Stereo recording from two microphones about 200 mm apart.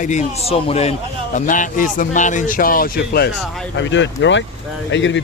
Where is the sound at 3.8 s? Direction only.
65° left (ahead or behind).